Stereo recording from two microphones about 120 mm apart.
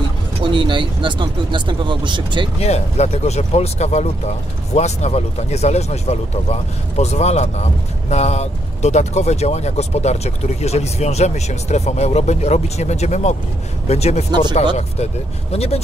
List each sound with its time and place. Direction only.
0.4 s speech: 45° right (ahead or behind)
2.6 s speech: 65° left (ahead or behind)